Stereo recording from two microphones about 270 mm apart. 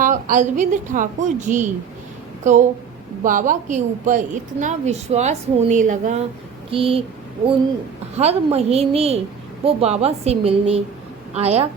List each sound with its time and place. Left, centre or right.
0.0 s a woman's voice: right
8.2 s a woman's voice: right